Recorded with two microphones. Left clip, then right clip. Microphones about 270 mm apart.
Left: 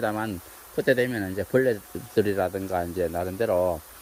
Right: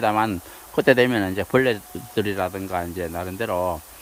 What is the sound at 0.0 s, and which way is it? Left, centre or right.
Speech, centre.